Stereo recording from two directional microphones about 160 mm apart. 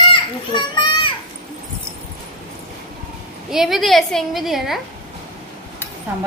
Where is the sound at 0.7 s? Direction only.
30° left (ahead or behind).